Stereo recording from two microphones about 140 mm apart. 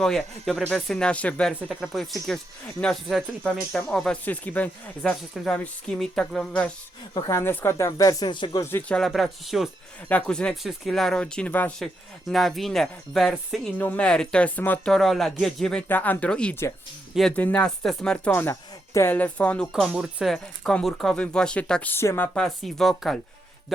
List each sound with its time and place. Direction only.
0.0 s speech: 5° left (ahead or behind)
1.6 s speech: 5° right (ahead or behind)
7.1 s speech: 25° left (ahead or behind)
8.7 s speech: 5° left (ahead or behind)
13.7 s speech: 10° left (ahead or behind)
14.9 s speech: centre (ahead or behind)
19.9 s speech: 5° right (ahead or behind); by 22.3 s 15° left (ahead or behind)
22.4 s speech: centre (ahead or behind)